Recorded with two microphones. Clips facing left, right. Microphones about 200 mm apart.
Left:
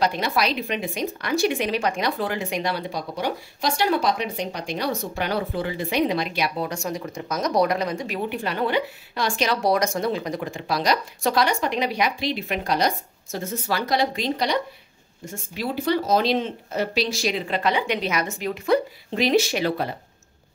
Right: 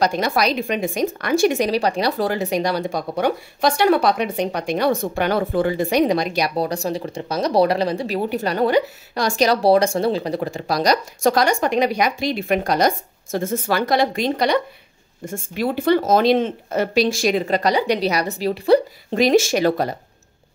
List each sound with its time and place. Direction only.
0.0 s a woman's voice: 45° right (ahead or behind)